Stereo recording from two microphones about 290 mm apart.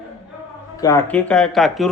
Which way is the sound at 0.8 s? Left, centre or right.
Centre.